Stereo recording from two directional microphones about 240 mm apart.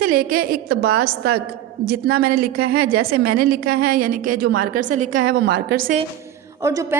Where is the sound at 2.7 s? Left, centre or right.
Right.